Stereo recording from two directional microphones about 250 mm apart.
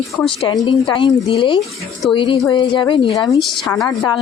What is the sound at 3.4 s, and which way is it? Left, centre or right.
Speech, centre.